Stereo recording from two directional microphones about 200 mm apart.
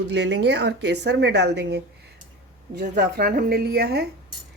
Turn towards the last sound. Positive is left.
turn(degrees=-55)  # may be behind; listen again after turning